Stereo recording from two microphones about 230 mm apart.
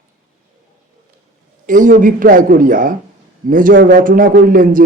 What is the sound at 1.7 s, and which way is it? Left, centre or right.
Speech, right.